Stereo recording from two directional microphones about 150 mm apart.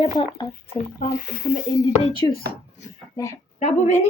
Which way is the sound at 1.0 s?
75° left (ahead or behind).